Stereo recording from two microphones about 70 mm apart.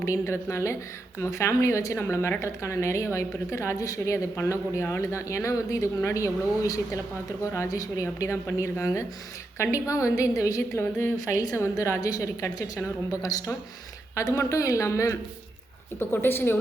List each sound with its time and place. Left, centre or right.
0.0 s speech: left
3.8 s speech: left
10.8 s speech: left
11.9 s a woman's voice: left
16.0 s speech: left